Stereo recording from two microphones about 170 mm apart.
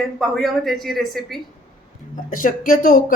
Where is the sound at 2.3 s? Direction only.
55° left (ahead or behind).